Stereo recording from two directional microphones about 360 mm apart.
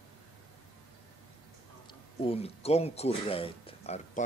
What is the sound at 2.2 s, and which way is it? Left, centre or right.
Speech, centre.